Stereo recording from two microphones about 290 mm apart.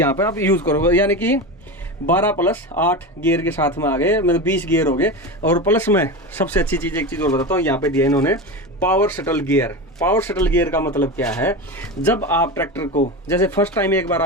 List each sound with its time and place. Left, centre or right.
0.0 s speech: centre